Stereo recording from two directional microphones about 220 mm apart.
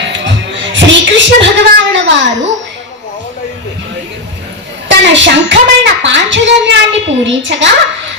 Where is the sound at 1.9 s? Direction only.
55° right (ahead or behind).